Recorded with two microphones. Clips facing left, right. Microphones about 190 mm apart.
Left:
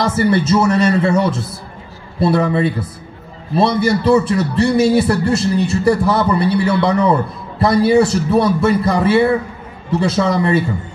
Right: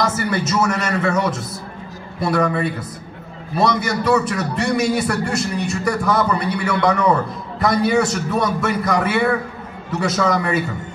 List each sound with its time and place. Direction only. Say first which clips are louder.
0.0 s a man's voice: left 5 dB; 30° left (ahead or behind)